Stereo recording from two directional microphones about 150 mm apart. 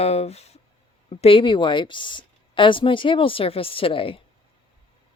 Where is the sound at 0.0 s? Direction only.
45° left (ahead or behind).